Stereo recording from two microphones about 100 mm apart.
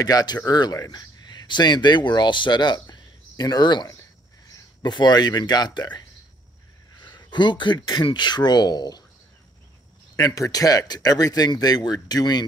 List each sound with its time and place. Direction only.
0.0 s speech: 40° left (ahead or behind)
10.1 s speech: 35° left (ahead or behind)